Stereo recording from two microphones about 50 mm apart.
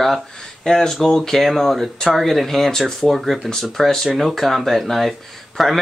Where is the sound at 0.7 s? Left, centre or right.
Centre.